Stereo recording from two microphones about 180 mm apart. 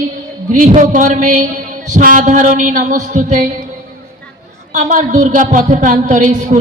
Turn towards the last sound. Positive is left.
turn(degrees=-45)  # may be behind; listen again after turning